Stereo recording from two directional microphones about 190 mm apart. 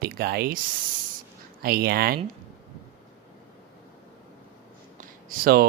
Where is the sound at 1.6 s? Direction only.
55° right (ahead or behind).